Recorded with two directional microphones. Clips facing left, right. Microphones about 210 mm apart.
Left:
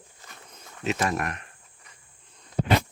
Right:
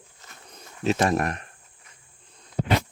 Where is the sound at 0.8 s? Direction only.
35° right (ahead or behind).